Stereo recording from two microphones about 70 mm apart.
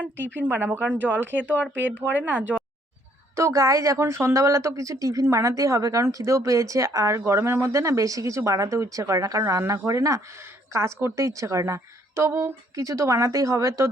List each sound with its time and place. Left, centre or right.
0.2 s speech: right
3.3 s speech: right
3.9 s speech: right